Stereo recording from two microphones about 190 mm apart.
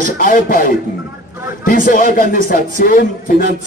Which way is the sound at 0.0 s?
45° left (ahead or behind).